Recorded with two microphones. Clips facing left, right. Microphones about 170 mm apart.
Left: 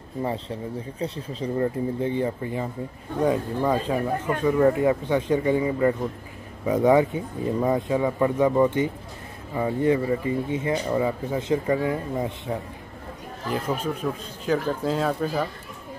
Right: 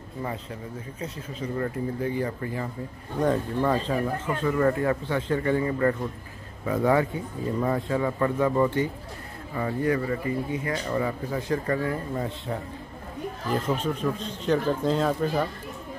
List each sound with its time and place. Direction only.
0.2 s speech: 30° left (ahead or behind)
13.5 s speech: 10° left (ahead or behind)